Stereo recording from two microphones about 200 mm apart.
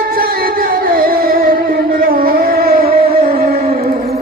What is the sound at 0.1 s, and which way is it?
Music, 50° right (ahead or behind).